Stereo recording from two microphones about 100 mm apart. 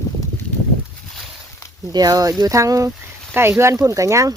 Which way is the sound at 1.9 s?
40° right (ahead or behind).